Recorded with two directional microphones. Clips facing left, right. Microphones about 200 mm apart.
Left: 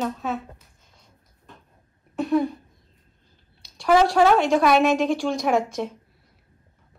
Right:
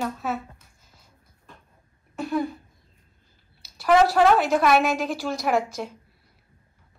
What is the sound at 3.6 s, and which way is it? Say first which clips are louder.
A woman's voice: even; 5° right (ahead or behind).